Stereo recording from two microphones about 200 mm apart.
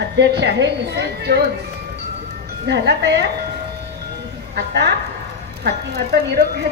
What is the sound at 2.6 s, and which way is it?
Speech, 60° right (ahead or behind).